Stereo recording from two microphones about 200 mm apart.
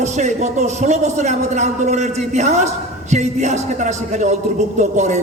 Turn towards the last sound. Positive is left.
turn(degrees=-35)  # may be behind; listen again after turning